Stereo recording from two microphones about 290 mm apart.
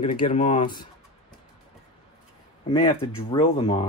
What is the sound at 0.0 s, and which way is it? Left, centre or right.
Speech, centre.